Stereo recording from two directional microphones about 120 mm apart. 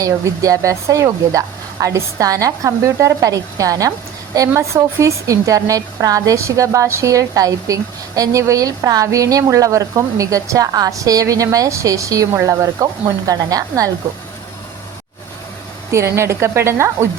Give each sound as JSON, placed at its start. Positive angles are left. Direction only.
{"t": 0.0, "sound": "a woman's voice", "side_deg": -30}
{"t": 15.9, "sound": "a woman's voice", "side_deg": -25}